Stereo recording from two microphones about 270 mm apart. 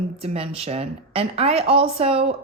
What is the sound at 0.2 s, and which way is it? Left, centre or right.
A woman's voice, right.